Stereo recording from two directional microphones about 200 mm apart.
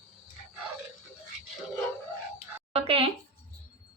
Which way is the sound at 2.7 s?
30° right (ahead or behind).